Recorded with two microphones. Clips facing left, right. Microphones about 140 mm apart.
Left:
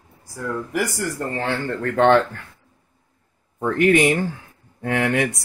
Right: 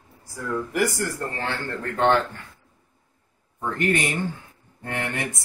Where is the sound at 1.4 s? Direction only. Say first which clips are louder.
Left 7 dB; 70° left (ahead or behind).